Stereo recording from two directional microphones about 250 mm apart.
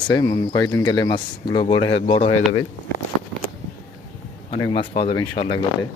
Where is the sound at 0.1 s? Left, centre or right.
Centre.